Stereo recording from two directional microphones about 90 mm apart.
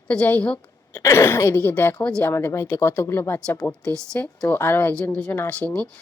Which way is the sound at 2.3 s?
30° left (ahead or behind).